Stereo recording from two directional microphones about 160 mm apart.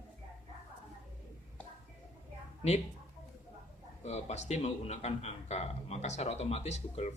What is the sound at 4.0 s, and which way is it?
A man's voice, 45° left (ahead or behind).